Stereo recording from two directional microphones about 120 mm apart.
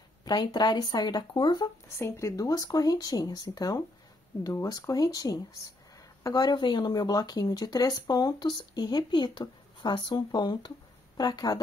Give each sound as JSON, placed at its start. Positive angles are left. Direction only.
{"t": 0.2, "sound": "speech", "side_deg": 35}
{"t": 2.0, "sound": "speech", "side_deg": 25}